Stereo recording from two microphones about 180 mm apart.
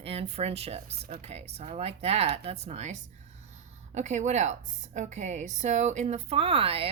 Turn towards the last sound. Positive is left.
turn(degrees=-30)  # may be behind; listen again after turning